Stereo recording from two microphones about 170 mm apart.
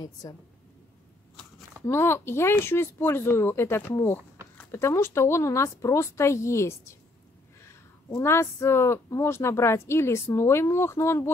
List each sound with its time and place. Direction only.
0.0 s a woman's voice: 20° left (ahead or behind)
1.8 s speech: 15° left (ahead or behind)